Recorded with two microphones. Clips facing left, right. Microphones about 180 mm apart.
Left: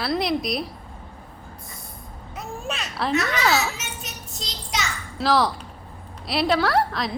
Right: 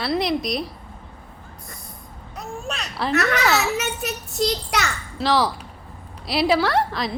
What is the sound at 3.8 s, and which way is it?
A child's voice, 65° right (ahead or behind).